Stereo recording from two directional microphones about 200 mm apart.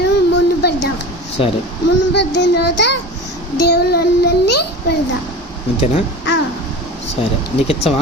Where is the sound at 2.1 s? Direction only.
60° left (ahead or behind).